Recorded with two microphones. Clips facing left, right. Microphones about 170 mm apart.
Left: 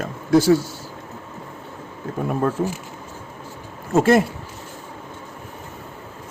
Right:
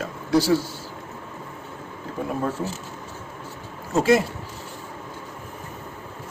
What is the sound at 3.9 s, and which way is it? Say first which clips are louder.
Speech: left 3 dB; 50° left (ahead or behind).